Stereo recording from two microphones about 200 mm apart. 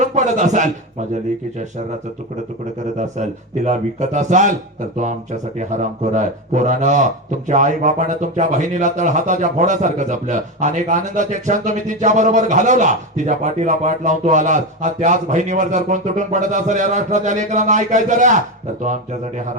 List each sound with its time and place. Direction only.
0.0 s a man's voice: 35° right (ahead or behind)
3.0 s speech: 35° right (ahead or behind)